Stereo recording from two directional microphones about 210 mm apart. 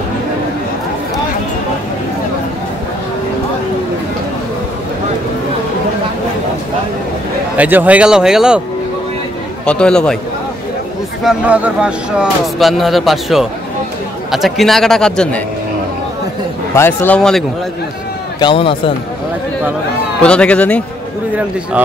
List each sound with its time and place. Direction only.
7.5 s speech: 5° right (ahead or behind)
9.7 s speech: 5° left (ahead or behind)
11.2 s speech: 5° right (ahead or behind)
16.7 s speech: 10° left (ahead or behind)
18.4 s speech: 25° left (ahead or behind)
20.2 s speech: 5° left (ahead or behind)
21.8 s speech: 5° right (ahead or behind)